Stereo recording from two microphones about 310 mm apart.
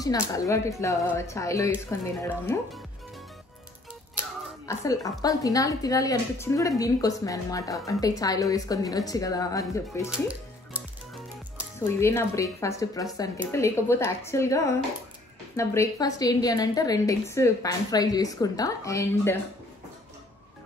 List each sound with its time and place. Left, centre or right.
0.0 s a woman's voice: centre
4.6 s a woman's voice: centre
10.0 s music: centre
11.8 s a woman's voice: centre